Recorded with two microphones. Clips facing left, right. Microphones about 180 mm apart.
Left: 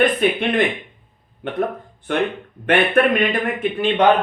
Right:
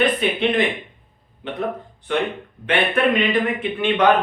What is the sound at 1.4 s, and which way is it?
Speech, 50° left (ahead or behind).